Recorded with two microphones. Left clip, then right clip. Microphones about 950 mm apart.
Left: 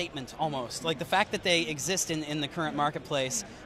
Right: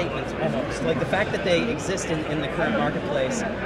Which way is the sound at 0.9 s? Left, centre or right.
Left.